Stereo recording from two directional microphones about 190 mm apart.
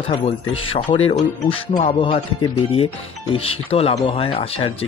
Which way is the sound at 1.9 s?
30° left (ahead or behind).